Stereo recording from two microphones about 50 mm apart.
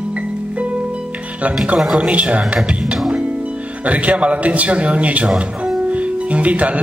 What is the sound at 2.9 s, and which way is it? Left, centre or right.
Music, centre.